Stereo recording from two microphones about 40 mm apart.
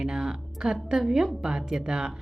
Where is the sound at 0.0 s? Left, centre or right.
Centre.